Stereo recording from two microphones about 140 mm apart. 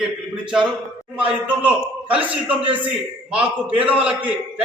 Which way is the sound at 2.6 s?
40° right (ahead or behind).